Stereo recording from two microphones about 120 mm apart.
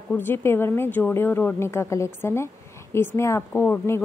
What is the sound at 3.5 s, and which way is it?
Speech, 10° left (ahead or behind).